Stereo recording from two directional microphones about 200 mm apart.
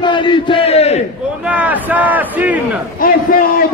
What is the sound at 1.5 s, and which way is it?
Speech, 10° right (ahead or behind).